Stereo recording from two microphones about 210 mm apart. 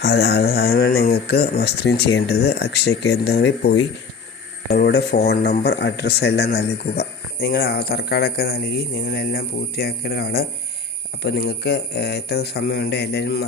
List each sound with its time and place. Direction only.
0.0 s a man's voice: 50° left (ahead or behind)